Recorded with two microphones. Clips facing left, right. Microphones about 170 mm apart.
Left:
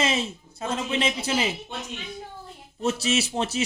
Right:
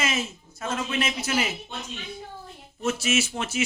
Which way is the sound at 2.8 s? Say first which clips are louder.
Left 1 dB; 35° left (ahead or behind).